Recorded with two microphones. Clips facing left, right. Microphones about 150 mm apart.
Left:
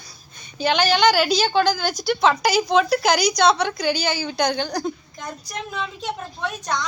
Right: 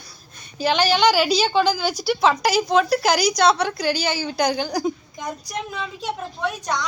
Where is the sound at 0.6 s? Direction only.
Centre (ahead or behind).